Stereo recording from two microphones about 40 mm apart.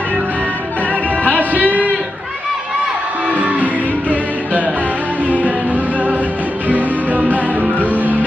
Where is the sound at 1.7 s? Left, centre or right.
Right.